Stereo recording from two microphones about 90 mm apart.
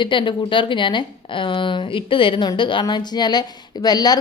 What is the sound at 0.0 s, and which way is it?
A woman's voice, 65° left (ahead or behind).